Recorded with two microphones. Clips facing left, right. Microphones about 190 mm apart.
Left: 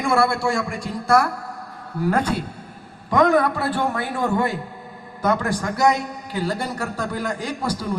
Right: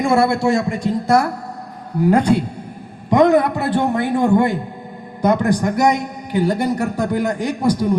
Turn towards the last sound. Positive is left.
turn(degrees=-20)  # may be behind; listen again after turning